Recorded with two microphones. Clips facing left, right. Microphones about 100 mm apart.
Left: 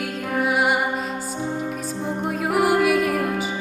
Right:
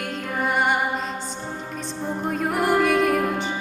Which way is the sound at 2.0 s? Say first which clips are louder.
Even; 5° left (ahead or behind).